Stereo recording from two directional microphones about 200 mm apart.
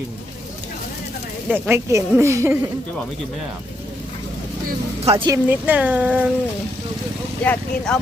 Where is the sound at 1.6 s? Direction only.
15° right (ahead or behind).